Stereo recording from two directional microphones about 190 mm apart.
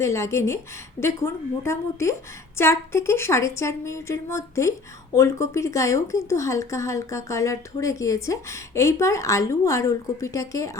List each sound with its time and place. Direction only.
0.0 s speech: 15° left (ahead or behind)